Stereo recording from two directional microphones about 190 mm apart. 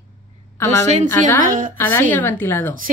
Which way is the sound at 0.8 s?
35° right (ahead or behind).